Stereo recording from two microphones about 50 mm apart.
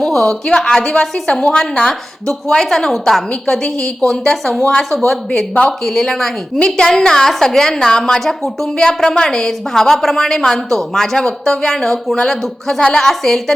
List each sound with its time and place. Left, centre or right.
0.0 s a woman's voice: centre
4.8 s a woman's voice: centre